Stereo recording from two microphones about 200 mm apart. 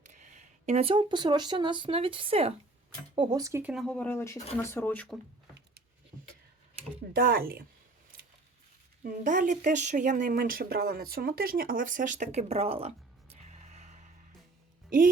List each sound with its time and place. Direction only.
0.1 s speech: 40° right (ahead or behind)
3.2 s speech: 20° right (ahead or behind); by 5.2 s 5° left (ahead or behind)
7.1 s speech: 50° right (ahead or behind)
9.0 s speech: 40° right (ahead or behind)
13.3 s a sound: 35° right (ahead or behind)
14.8 s speech: 40° right (ahead or behind)